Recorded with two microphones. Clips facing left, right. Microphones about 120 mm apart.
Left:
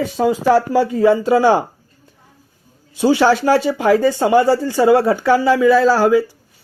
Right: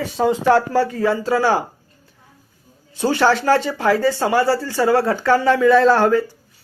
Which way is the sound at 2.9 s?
15° left (ahead or behind).